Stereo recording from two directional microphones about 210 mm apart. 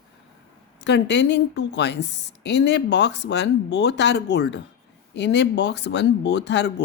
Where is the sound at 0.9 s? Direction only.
55° left (ahead or behind).